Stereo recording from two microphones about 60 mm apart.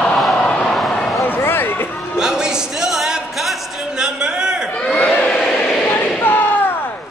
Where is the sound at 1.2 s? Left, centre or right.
Left.